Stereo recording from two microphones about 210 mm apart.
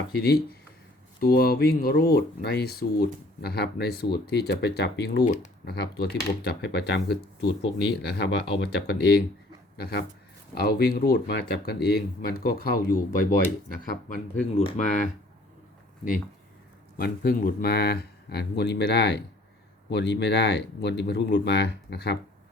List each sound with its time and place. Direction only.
1.2 s speech: 45° left (ahead or behind)
5.2 s speech: 35° left (ahead or behind)
5.6 s speech: 50° left (ahead or behind)
17.0 s speech: 45° left (ahead or behind)